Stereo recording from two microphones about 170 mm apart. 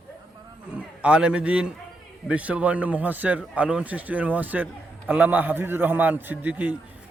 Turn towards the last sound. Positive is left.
turn(degrees=-10)  # may be behind; listen again after turning